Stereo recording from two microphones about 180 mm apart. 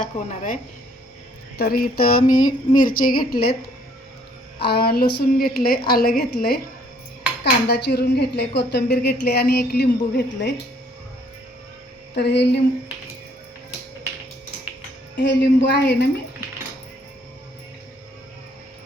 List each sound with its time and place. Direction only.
0.0 s speech: 50° left (ahead or behind)
1.5 s speech: 60° left (ahead or behind)
4.6 s speech: 60° left (ahead or behind)
7.7 s speech: 65° left (ahead or behind)
12.1 s a woman's voice: 70° left (ahead or behind)
15.2 s a woman's voice: 70° left (ahead or behind)